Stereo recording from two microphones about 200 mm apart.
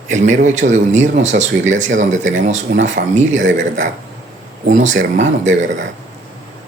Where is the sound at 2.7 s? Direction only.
60° right (ahead or behind).